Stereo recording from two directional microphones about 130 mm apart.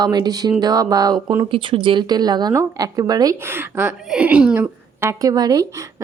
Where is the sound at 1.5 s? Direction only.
40° right (ahead or behind); by 4.7 s 10° right (ahead or behind).